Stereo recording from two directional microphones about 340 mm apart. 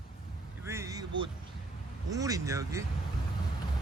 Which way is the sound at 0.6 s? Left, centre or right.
Centre.